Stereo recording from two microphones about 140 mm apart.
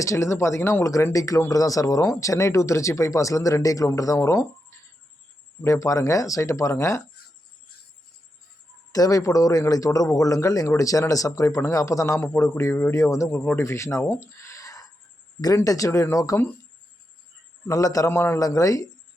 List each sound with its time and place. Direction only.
0.0 s a man's voice: 20° left (ahead or behind)
8.9 s a man's voice: 25° left (ahead or behind)
17.7 s a man's voice: 25° left (ahead or behind)